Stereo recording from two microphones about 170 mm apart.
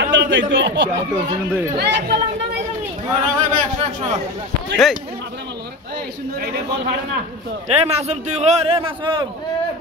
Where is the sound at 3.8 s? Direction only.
35° right (ahead or behind).